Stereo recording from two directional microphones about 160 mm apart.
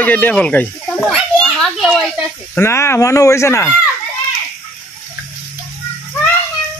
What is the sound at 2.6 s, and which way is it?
A man's voice, 15° left (ahead or behind).